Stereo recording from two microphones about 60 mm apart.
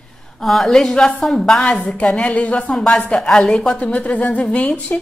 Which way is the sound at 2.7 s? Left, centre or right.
Centre.